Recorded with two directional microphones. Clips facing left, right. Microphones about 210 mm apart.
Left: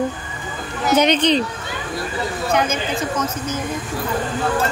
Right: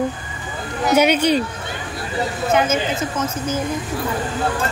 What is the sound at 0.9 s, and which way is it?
Speech, 10° right (ahead or behind).